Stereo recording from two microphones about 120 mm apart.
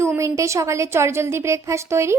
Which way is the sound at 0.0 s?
25° right (ahead or behind).